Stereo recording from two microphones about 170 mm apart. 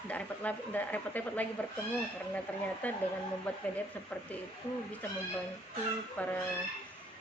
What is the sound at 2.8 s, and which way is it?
Speech, 10° left (ahead or behind).